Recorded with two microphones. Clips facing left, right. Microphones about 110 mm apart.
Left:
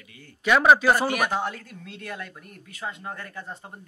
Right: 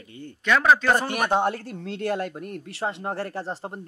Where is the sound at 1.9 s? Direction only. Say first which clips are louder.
Right 11 dB; 75° right (ahead or behind).